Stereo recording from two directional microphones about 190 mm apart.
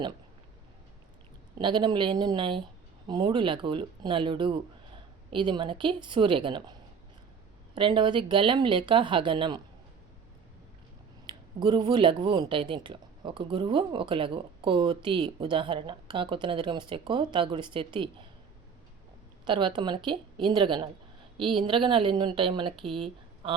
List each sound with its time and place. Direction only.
1.5 s speech: 25° right (ahead or behind)
7.8 s speech: 25° right (ahead or behind)
11.3 s speech: 25° right (ahead or behind)
19.5 s speech: 25° right (ahead or behind)